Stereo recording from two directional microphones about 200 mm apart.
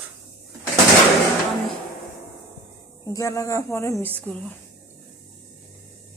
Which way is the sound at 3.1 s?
15° left (ahead or behind).